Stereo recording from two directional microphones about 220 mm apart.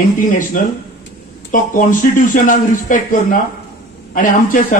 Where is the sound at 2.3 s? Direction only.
35° left (ahead or behind).